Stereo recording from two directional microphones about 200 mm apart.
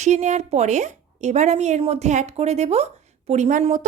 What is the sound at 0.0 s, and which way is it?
Speech, 35° right (ahead or behind).